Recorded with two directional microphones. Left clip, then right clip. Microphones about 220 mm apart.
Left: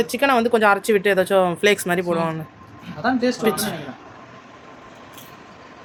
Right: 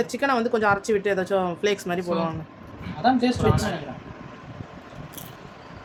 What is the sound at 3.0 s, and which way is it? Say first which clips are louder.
Speech: even; 20° right (ahead or behind).